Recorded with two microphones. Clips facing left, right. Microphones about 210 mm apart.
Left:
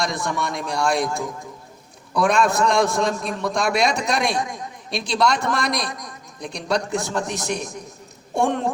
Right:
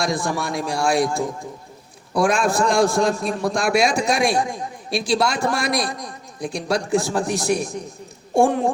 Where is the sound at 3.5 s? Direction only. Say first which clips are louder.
Right 1 dB; 5° right (ahead or behind).